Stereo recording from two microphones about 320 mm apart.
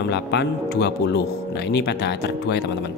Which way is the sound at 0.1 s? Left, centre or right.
Left.